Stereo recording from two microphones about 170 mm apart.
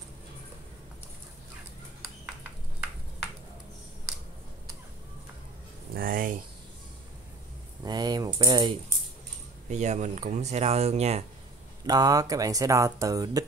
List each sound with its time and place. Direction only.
5.9 s speech: 55° right (ahead or behind)
7.8 s typing: 25° right (ahead or behind)
9.7 s speech: 45° right (ahead or behind)
11.8 s speech: 20° right (ahead or behind)